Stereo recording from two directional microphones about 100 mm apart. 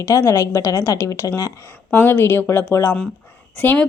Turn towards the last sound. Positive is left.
turn(degrees=20)  # may be behind; listen again after turning